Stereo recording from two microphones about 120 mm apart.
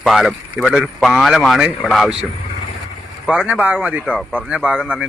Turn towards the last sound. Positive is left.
turn(degrees=-10)  # may be behind; listen again after turning